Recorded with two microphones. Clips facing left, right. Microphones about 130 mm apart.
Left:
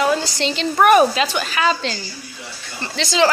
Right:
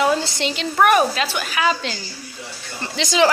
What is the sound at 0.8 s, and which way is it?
A woman's voice, centre (ahead or behind).